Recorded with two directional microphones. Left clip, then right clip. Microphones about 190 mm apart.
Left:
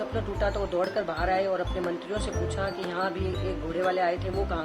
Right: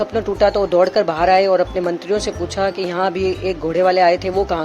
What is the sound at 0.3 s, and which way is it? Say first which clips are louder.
Speech: right 14 dB; 40° right (ahead or behind).